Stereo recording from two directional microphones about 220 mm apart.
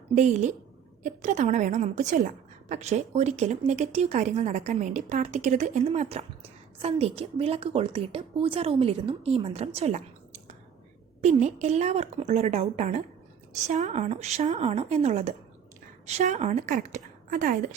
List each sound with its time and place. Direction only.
0.1 s a woman's voice: 35° right (ahead or behind)
11.2 s a woman's voice: 30° right (ahead or behind)